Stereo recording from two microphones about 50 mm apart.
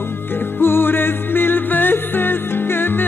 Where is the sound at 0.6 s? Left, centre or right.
Left.